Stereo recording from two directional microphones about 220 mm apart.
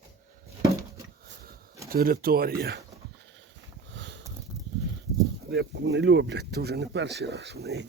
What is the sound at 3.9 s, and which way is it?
Sniff, 55° right (ahead or behind).